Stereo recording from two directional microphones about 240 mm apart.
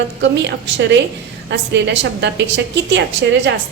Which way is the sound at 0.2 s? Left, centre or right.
Right.